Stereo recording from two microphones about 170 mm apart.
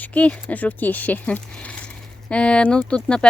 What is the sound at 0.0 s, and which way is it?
Speech, 10° left (ahead or behind).